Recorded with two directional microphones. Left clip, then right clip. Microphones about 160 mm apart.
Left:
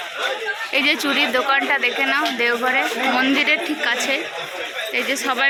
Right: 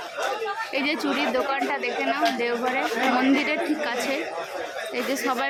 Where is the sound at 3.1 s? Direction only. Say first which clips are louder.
Left 8 dB; 15° right (ahead or behind).